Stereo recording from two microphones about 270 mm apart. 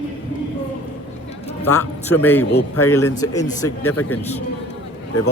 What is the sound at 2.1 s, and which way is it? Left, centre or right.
Speech, centre.